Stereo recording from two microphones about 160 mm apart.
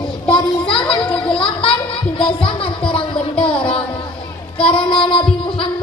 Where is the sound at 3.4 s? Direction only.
35° left (ahead or behind).